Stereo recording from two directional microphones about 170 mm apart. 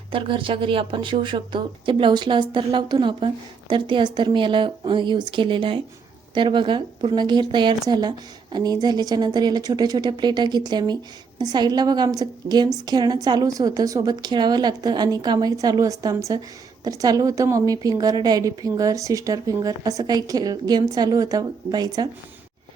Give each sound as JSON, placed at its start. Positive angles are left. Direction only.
{"t": 0.1, "sound": "a woman's voice", "side_deg": -30}